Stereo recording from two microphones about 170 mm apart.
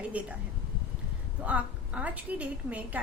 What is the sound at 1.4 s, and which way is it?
A woman's voice, 10° right (ahead or behind).